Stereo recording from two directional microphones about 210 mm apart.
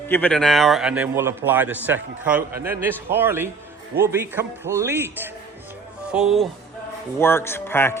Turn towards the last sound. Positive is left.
turn(degrees=10)  # may be behind; listen again after turning